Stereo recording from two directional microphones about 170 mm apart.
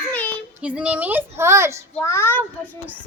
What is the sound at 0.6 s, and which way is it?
Speech, 5° right (ahead or behind).